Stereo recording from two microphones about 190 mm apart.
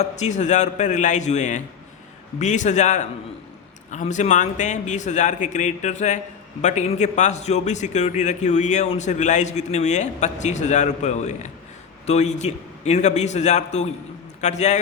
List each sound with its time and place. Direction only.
0.0 s a man's voice: 40° left (ahead or behind)